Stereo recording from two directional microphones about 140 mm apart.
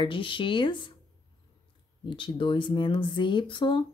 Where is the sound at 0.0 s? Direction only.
35° left (ahead or behind).